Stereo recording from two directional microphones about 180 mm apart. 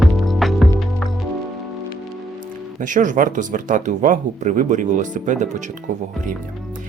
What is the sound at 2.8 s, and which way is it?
Speech, 45° right (ahead or behind).